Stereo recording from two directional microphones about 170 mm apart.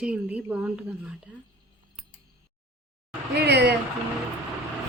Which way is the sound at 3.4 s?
75° right (ahead or behind).